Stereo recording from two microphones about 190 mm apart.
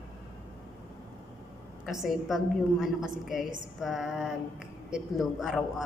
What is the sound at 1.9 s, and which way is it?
A man's voice, centre (ahead or behind).